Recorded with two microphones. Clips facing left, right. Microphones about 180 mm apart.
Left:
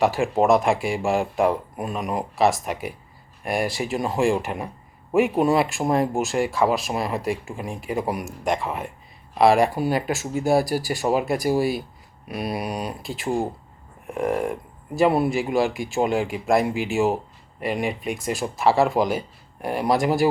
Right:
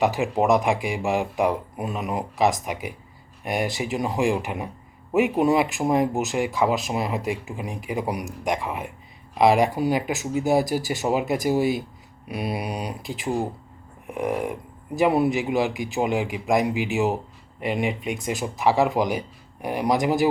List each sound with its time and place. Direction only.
0.0 s speech: 20° right (ahead or behind)